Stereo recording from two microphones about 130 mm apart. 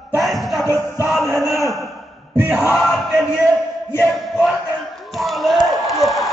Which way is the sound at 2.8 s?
Centre (ahead or behind).